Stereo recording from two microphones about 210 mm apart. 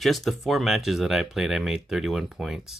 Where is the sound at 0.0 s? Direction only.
Centre (ahead or behind).